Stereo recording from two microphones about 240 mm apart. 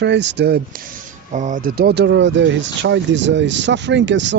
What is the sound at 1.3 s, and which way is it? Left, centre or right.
Speech, right.